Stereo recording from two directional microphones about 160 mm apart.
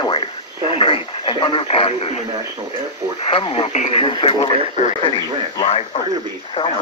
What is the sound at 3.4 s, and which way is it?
Speech, 35° left (ahead or behind).